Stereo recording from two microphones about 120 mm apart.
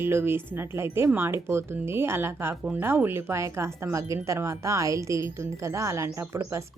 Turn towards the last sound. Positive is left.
turn(degrees=-25)  # may be behind; listen again after turning